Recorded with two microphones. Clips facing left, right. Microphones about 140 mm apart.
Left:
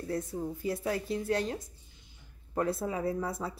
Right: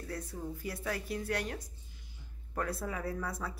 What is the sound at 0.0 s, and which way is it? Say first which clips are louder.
A woman's voice: left 6 dB; 25° left (ahead or behind).